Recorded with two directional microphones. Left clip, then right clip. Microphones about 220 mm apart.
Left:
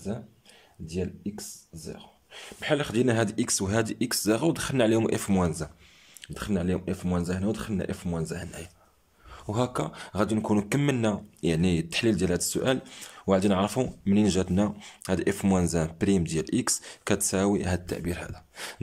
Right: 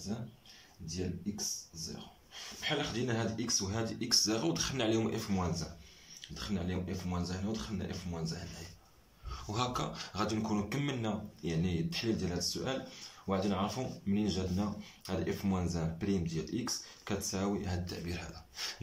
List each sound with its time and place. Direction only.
0.8 s speech: 50° left (ahead or behind)
9.3 s speech: 35° left (ahead or behind)